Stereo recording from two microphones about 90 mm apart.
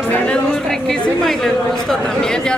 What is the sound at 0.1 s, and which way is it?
A woman's voice, 15° left (ahead or behind).